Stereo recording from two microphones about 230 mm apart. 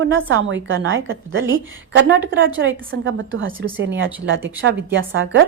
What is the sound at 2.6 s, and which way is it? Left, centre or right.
A woman's voice, right.